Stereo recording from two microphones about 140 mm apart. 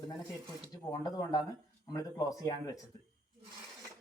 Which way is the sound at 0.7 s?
25° left (ahead or behind).